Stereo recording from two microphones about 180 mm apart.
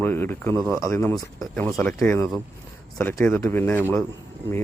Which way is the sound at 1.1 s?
5° left (ahead or behind).